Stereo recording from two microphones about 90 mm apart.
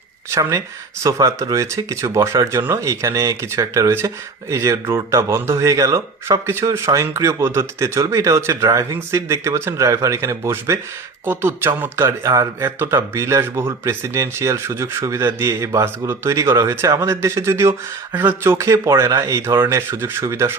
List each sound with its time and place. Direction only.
0.3 s speech: 35° right (ahead or behind)
18.5 s speech: 35° right (ahead or behind)